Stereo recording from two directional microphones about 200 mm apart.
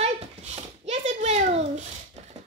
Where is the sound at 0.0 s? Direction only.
35° right (ahead or behind).